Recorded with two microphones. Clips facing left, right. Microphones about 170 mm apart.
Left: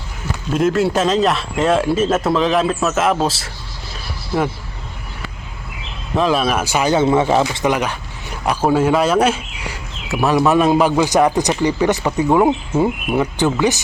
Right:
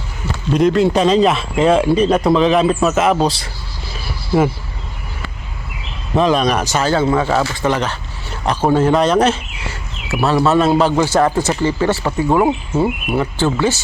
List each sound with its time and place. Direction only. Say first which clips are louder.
0.5 s speech: right 3 dB; 5° left (ahead or behind)
6.1 s speech: right 2 dB; 5° left (ahead or behind); by 12.3 s 20° left (ahead or behind)
12.7 s speech: even; 5° right (ahead or behind)
13.1 s speech: even; 15° left (ahead or behind)